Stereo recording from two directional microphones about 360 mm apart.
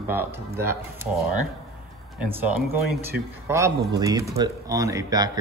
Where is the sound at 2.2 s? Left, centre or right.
Centre.